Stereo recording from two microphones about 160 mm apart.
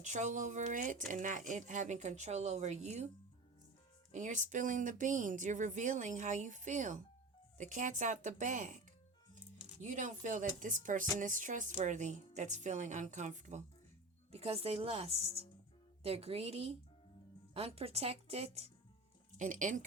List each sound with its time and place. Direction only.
0.0 s speech: 50° right (ahead or behind)
4.1 s speech: 50° right (ahead or behind)
9.8 s speech: 50° right (ahead or behind)
14.3 s speech: 40° right (ahead or behind)
19.4 s speech: 50° right (ahead or behind)